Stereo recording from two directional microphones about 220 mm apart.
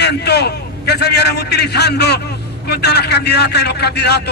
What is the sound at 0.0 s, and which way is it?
A man's voice, 50° left (ahead or behind).